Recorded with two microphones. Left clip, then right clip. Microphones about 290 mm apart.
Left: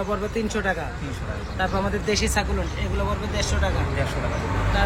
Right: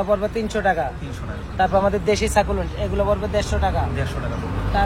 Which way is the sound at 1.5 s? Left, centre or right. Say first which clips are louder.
Right 8 dB; right.